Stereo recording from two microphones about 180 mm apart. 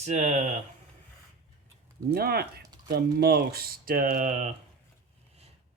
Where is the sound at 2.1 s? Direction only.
60° right (ahead or behind).